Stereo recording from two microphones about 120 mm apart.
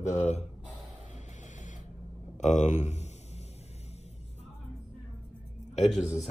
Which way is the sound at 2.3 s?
75° left (ahead or behind).